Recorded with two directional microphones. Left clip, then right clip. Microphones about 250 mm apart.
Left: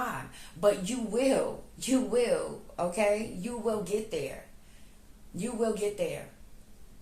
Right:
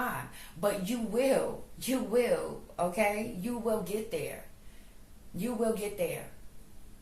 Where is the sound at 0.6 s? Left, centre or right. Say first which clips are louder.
Left 5 dB; centre.